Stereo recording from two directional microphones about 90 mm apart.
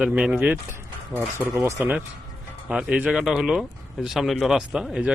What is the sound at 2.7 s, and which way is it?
A man's voice, 10° right (ahead or behind).